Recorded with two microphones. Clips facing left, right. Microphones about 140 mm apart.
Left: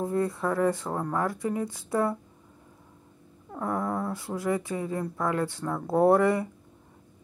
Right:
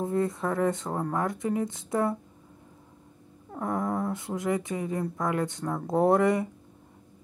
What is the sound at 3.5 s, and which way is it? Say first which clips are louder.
Speech: even; 20° right (ahead or behind).